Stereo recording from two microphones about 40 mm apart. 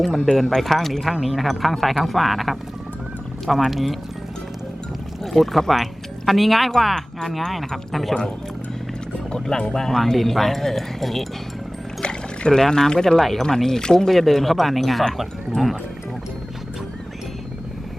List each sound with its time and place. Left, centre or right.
0.3 s speech: centre
5.2 s speech: centre
9.3 s speech: centre
12.0 s pour: left
12.5 s speech: centre